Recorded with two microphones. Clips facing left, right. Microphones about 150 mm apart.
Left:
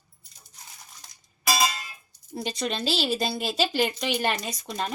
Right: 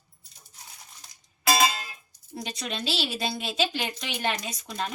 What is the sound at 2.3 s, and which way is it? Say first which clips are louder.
Speech: left 4 dB; 30° left (ahead or behind).